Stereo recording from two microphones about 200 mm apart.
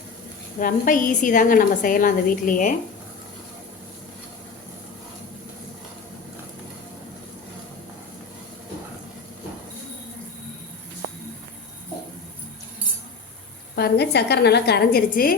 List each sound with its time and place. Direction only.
0.6 s a woman's voice: 40° left (ahead or behind)
13.7 s a woman's voice: 55° left (ahead or behind)